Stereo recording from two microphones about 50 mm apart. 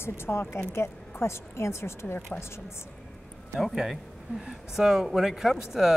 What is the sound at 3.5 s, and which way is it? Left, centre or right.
A man's voice, centre.